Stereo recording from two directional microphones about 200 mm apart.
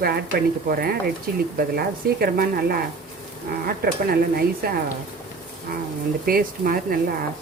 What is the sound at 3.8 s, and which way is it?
Speech, 50° right (ahead or behind).